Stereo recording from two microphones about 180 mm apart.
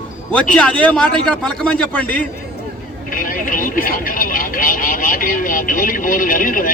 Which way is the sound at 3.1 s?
50° left (ahead or behind).